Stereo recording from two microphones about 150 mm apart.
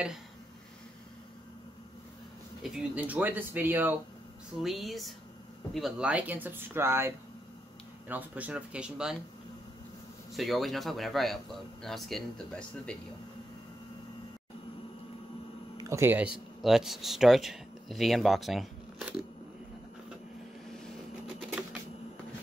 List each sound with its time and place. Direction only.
2.6 s speech: 5° right (ahead or behind)
4.6 s speech: centre (ahead or behind)
10.3 s speech: centre (ahead or behind)
15.8 s speech: 20° right (ahead or behind)
16.6 s speech: centre (ahead or behind)